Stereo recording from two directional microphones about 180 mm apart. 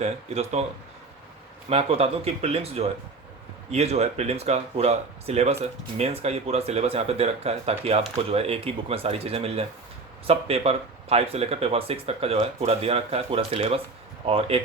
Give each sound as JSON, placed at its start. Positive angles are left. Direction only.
{"t": 0.0, "sound": "speech", "side_deg": -35}
{"t": 1.7, "sound": "speech", "side_deg": -35}